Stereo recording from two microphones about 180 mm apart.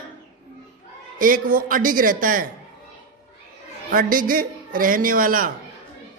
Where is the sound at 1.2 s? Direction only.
50° right (ahead or behind).